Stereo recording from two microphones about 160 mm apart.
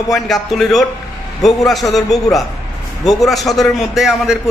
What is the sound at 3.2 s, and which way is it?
A man's voice, centre (ahead or behind).